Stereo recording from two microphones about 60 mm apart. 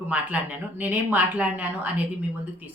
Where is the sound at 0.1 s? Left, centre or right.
Right.